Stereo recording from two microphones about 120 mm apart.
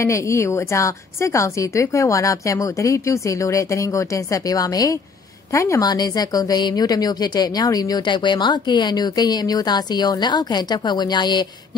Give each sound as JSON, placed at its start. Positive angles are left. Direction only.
{"t": 0.0, "sound": "a woman's voice", "side_deg": 25}